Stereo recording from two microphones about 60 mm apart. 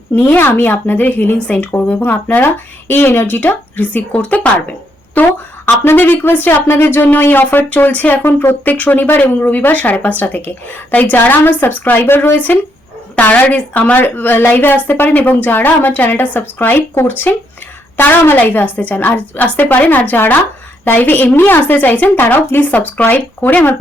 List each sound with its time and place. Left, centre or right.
0.2 s a woman's voice: left
6.7 s a woman's voice: left
8.2 s speech: left
8.6 s a woman's voice: left
13.1 s a woman's voice: left